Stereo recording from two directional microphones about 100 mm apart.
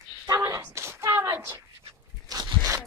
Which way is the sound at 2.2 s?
35° right (ahead or behind).